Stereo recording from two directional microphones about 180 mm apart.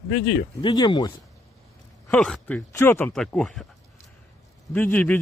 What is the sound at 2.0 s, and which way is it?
Speech, centre (ahead or behind).